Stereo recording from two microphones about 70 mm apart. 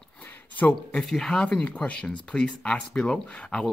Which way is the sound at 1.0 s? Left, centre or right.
Centre.